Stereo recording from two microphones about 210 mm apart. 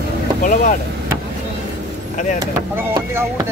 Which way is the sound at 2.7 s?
10° right (ahead or behind).